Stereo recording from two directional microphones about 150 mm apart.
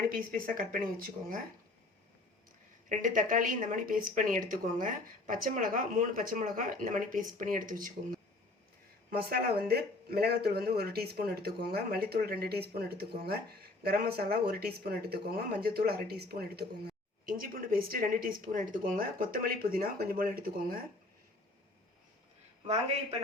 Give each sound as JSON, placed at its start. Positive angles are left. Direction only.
{"t": 0.2, "sound": "speech", "side_deg": -65}
{"t": 2.9, "sound": "speech", "side_deg": -60}
{"t": 9.0, "sound": "speech", "side_deg": -90}
{"t": 17.2, "sound": "a woman's voice", "side_deg": -70}